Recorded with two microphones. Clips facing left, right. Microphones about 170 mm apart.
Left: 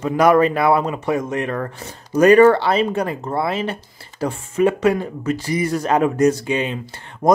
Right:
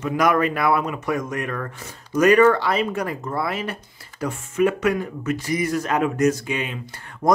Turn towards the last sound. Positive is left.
turn(degrees=25)  # may be behind; listen again after turning